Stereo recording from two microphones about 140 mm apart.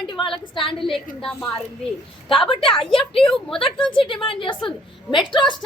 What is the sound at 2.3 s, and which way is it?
A woman's voice, 40° left (ahead or behind).